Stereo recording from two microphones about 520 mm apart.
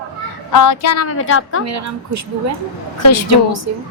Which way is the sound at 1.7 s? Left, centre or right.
Right.